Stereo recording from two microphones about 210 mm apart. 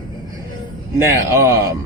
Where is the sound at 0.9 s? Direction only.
10° right (ahead or behind).